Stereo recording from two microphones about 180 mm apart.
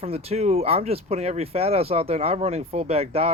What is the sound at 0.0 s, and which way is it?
Speech, 35° right (ahead or behind).